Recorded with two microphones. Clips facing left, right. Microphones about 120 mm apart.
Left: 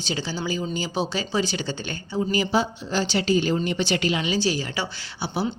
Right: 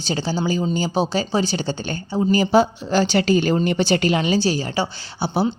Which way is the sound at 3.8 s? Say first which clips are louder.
Right 5 dB; 40° right (ahead or behind).